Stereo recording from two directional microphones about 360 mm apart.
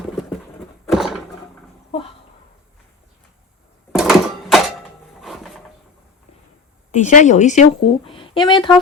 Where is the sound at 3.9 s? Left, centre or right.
Centre.